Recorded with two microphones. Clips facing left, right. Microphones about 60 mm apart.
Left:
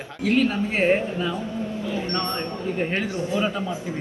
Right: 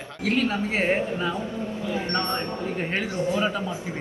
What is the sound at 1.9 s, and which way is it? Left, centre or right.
Speech, right.